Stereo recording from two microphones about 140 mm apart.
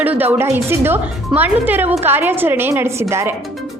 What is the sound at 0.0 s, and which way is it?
A woman's voice, 10° right (ahead or behind).